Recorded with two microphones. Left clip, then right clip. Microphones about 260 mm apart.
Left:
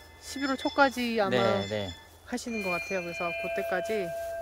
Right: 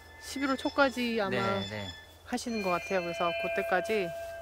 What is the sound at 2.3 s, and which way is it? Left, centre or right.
Speech, centre.